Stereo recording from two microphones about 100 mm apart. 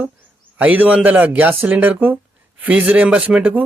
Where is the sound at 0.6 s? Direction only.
15° right (ahead or behind).